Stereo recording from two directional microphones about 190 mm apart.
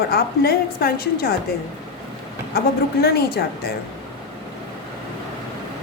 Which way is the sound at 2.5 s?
55° left (ahead or behind).